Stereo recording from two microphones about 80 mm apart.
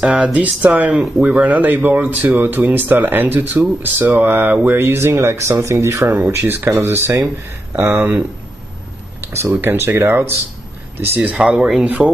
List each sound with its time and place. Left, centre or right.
0.0 s speech: centre
9.3 s speech: right
11.1 s speech: centre